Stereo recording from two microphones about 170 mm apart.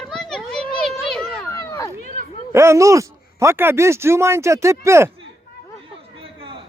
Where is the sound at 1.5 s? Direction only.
20° left (ahead or behind).